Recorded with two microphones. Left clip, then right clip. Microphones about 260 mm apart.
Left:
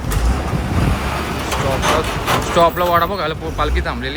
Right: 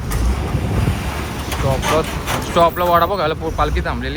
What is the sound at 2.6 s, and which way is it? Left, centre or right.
Speech, centre.